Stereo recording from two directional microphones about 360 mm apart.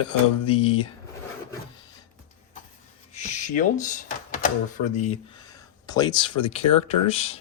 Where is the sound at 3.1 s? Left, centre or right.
Centre.